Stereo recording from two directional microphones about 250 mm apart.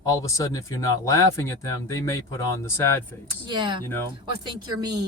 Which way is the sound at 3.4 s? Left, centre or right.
Centre.